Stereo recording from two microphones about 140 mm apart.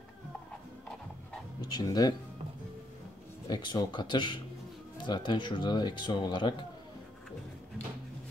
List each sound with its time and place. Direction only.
1.6 s speech: 30° left (ahead or behind)
3.4 s speech: 30° left (ahead or behind)